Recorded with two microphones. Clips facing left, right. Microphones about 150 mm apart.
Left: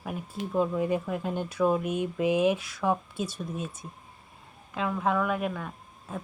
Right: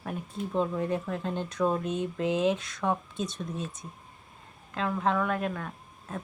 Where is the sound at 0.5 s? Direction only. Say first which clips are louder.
Left 2 dB; 5° left (ahead or behind).